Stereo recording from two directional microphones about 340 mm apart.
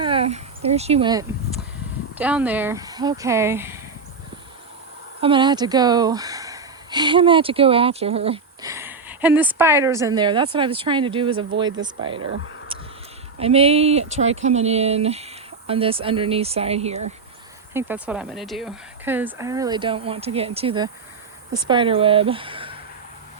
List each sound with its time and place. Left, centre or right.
0.0 s a sound: centre
2.1 s speech: centre
5.2 s speech: centre
13.4 s speech: centre
17.7 s speech: centre